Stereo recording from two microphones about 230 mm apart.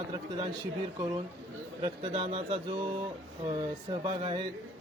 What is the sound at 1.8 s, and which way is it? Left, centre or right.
A man's voice, right.